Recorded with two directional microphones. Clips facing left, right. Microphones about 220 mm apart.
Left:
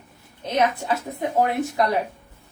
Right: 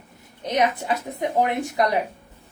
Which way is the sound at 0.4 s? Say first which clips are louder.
Even; 15° right (ahead or behind).